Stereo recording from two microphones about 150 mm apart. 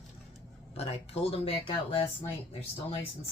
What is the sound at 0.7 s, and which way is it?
Speech, 40° left (ahead or behind).